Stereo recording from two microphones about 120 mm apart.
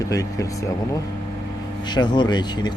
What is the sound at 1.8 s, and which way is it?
Speech, 40° left (ahead or behind).